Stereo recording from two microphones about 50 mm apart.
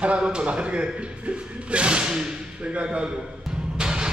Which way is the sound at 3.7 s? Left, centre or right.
Centre.